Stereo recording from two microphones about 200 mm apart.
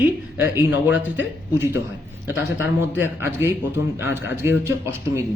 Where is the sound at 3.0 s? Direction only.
10° right (ahead or behind).